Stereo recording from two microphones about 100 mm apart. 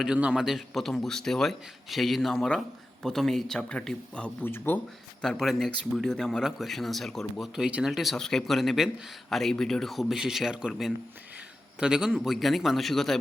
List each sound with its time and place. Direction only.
0.0 s speech: 10° right (ahead or behind); by 4.4 s 10° left (ahead or behind)
4.4 s speech: 20° left (ahead or behind)
5.2 s speech: 5° left (ahead or behind)